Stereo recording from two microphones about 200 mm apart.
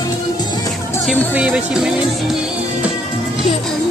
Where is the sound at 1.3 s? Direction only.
5° right (ahead or behind).